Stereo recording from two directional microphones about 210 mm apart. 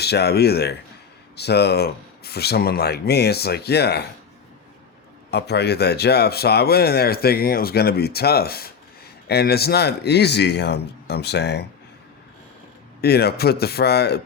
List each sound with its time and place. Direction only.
0.0 s speech: 50° left (ahead or behind)
5.3 s speech: 50° left (ahead or behind)
13.0 s speech: 50° left (ahead or behind)